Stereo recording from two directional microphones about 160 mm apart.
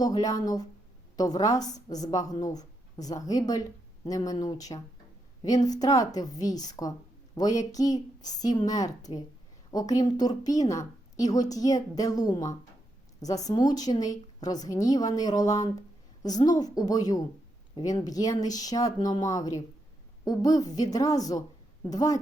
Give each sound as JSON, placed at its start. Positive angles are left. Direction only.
{"t": 0.0, "sound": "a woman's voice", "side_deg": 25}